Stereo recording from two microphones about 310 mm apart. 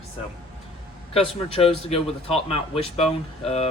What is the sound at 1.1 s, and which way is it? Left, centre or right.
Speech, centre.